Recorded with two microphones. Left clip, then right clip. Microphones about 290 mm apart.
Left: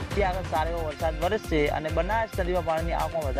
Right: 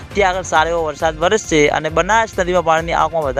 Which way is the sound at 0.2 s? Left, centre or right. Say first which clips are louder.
Right 13 dB; right.